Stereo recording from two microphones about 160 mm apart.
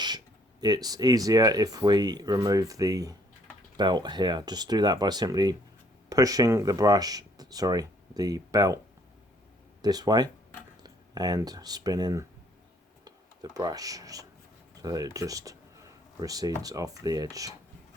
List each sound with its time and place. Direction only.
0.6 s speech: 25° right (ahead or behind)
9.8 s speech: 25° right (ahead or behind)